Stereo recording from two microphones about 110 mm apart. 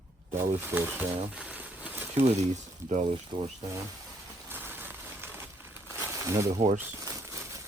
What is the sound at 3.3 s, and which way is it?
Speech, 55° right (ahead or behind).